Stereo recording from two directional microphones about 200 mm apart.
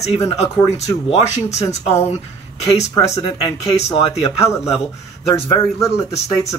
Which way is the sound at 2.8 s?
35° left (ahead or behind).